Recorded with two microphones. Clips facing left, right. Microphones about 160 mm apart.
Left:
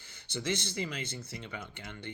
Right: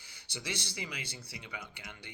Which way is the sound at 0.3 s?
10° right (ahead or behind).